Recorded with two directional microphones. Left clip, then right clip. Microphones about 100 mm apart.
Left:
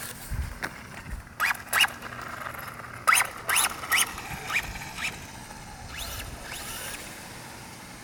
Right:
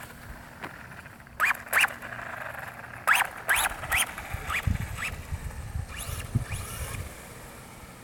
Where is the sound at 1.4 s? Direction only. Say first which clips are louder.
Even; 15° left (ahead or behind).